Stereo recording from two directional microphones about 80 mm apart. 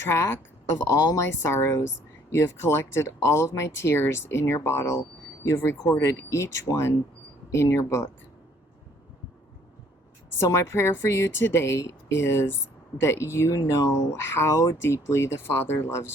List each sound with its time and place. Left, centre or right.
0.1 s speech: left
10.5 s speech: left